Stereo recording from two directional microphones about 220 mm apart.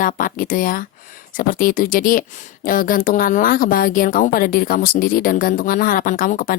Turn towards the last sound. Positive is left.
turn(degrees=40)  # may be behind; listen again after turning